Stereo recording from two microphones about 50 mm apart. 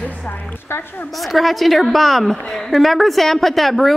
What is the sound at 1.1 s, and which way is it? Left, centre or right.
A woman's voice, centre.